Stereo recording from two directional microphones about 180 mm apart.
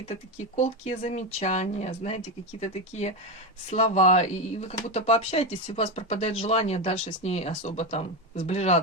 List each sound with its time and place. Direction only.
0.1 s speech: 40° left (ahead or behind)